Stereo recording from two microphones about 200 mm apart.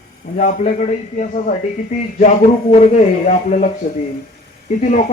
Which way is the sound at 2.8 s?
35° left (ahead or behind).